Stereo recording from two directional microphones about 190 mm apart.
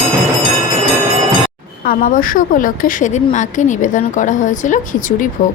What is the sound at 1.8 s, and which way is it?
A woman's voice, 45° left (ahead or behind).